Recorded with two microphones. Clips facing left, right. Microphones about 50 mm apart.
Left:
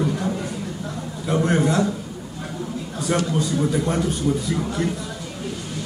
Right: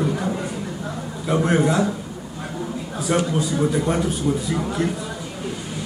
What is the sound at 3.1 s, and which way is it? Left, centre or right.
A man's voice, centre.